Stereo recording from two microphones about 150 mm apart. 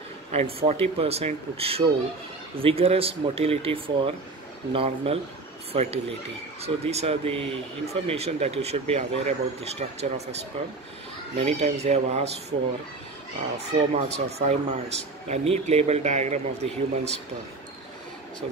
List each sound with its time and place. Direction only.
0.3 s speech: 45° right (ahead or behind)
11.3 s speech: 45° right (ahead or behind)
13.9 s speech: 45° right (ahead or behind)